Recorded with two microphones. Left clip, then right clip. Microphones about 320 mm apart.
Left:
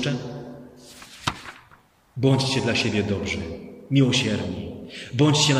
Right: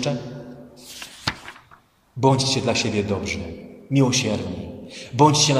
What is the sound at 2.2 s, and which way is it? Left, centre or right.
A man's voice, centre.